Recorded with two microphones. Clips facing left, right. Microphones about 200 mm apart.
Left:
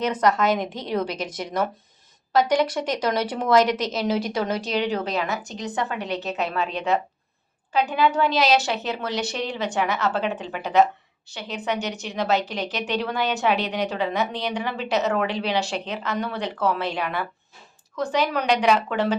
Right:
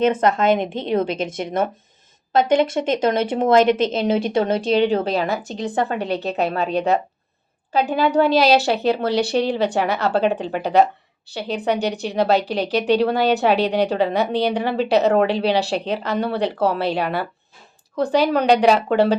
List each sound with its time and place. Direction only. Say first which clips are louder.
0.0 s speech: right 4 dB; 25° right (ahead or behind)